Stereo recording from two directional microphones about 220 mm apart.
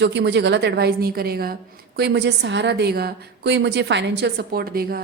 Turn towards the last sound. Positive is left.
turn(degrees=-45)  # may be behind; listen again after turning